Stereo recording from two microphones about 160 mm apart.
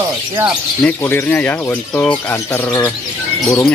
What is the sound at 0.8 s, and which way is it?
Speech, 10° left (ahead or behind).